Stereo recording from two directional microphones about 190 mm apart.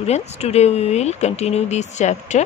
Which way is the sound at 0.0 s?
35° left (ahead or behind).